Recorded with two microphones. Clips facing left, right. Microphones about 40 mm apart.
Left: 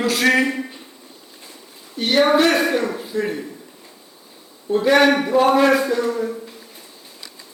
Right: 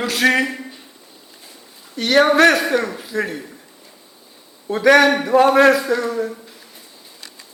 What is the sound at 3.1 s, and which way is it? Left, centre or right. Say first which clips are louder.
Speech: right 1 dB; right.